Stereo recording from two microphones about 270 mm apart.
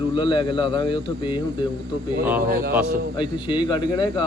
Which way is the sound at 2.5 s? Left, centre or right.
Right.